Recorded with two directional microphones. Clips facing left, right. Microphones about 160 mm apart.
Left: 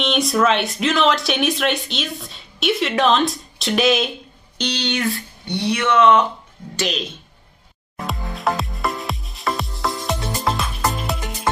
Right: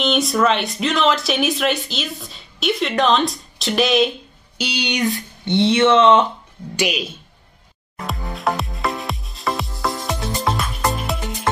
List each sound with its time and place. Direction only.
0.0 s speech: centre (ahead or behind)
4.6 s speech: 10° right (ahead or behind); by 6.2 s 25° right (ahead or behind)
6.8 s speech: 10° right (ahead or behind)
8.1 s music: centre (ahead or behind)